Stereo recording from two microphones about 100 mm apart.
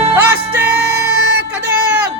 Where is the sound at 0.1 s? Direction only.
20° right (ahead or behind).